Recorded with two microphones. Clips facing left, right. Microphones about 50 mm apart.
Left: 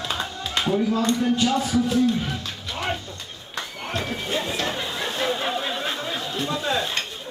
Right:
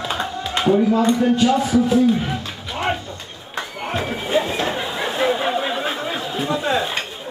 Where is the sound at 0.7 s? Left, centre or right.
Right.